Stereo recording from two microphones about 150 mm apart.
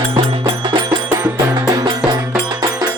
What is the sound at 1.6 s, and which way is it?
Music, 25° right (ahead or behind).